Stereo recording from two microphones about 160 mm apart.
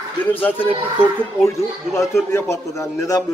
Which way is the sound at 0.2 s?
10° left (ahead or behind).